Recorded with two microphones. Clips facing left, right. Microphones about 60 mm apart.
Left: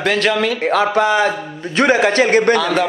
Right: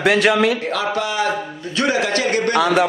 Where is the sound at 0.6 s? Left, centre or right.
Left.